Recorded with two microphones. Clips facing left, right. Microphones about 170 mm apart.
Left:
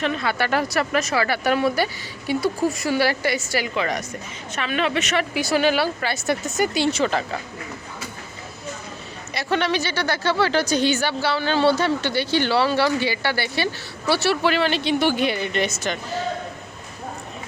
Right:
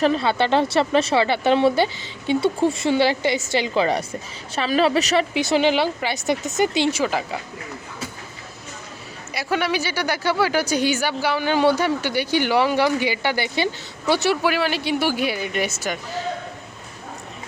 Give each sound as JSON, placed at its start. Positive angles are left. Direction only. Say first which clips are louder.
{"t": 0.0, "sound": "a woman's voice", "louder": "right 4 dB", "side_deg": -30}
{"t": 5.3, "sound": "a woman's voice", "louder": "right 1 dB", "side_deg": -20}
{"t": 9.3, "sound": "speech", "louder": "even", "side_deg": -10}